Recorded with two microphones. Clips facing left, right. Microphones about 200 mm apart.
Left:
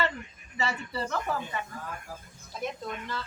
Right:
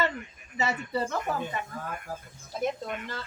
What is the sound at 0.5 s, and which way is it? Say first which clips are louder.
Speech: right 3 dB; 20° right (ahead or behind).